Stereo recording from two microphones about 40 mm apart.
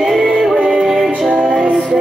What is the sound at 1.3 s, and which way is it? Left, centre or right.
Music, right.